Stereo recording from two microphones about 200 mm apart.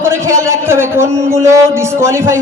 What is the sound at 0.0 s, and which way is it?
A man's voice, 15° right (ahead or behind).